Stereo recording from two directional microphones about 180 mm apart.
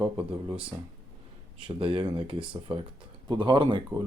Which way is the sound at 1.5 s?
30° right (ahead or behind).